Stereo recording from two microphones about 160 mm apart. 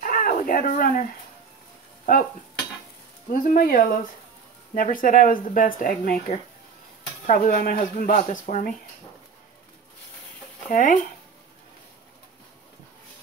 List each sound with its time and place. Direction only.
0.0 s cat: 55° left (ahead or behind)
3.3 s speech: 60° left (ahead or behind)
4.7 s speech: 60° left (ahead or behind)
7.2 s speech: 55° left (ahead or behind)
10.7 s speech: 55° left (ahead or behind)